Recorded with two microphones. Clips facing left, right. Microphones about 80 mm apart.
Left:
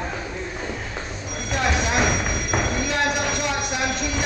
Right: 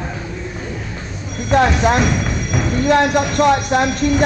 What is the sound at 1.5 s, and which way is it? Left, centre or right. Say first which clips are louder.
Speech: right 9 dB; right.